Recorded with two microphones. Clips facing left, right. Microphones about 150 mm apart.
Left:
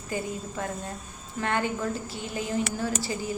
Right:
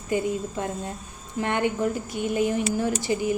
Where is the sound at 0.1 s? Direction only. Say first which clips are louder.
Right 7 dB; 20° right (ahead or behind).